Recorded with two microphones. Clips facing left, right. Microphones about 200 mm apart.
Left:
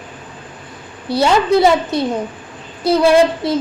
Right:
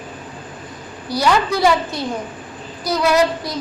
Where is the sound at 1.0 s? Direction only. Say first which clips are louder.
Left 4 dB; 25° left (ahead or behind).